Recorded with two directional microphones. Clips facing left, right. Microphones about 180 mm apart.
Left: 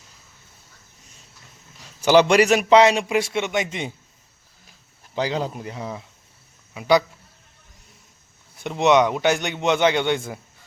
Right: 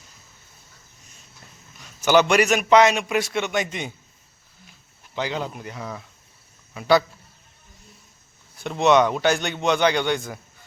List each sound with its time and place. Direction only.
1.8 s a man's voice: 30° left (ahead or behind)
5.1 s a man's voice: 35° left (ahead or behind); by 7.0 s 15° left (ahead or behind)
8.5 s a man's voice: 20° left (ahead or behind)